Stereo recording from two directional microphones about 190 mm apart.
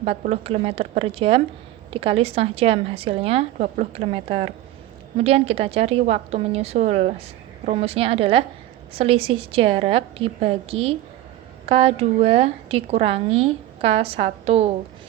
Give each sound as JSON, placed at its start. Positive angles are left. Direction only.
{"t": 0.0, "sound": "a woman's voice", "side_deg": -35}